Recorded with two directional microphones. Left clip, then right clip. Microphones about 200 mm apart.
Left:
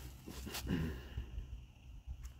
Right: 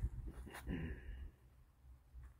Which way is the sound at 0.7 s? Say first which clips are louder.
Left 6 dB; 15° left (ahead or behind).